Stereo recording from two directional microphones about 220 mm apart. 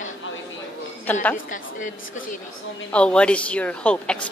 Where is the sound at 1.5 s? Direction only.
35° left (ahead or behind).